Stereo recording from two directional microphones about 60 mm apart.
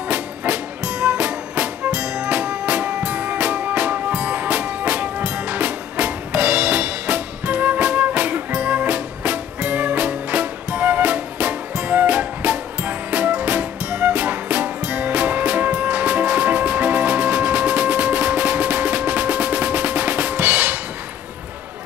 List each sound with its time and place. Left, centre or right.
0.1 s music: right